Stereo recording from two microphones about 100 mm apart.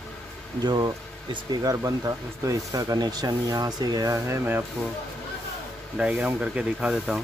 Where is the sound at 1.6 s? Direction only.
35° right (ahead or behind).